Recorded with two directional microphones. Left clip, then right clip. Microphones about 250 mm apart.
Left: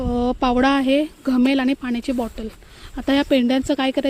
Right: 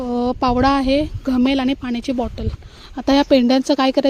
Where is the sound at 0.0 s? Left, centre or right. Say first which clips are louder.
Right 2 dB; centre.